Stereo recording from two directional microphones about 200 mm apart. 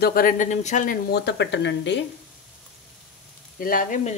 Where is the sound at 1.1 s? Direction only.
55° left (ahead or behind).